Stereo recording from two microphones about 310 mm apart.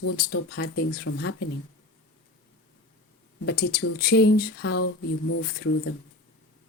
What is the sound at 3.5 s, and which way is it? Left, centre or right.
Speech, left.